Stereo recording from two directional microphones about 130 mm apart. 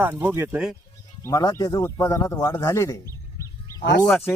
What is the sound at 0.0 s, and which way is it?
Speech, 15° right (ahead or behind).